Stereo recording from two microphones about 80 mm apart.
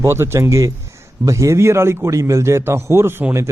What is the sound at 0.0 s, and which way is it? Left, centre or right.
A man's voice, right.